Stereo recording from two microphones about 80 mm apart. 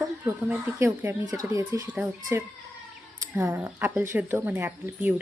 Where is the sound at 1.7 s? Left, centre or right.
Right.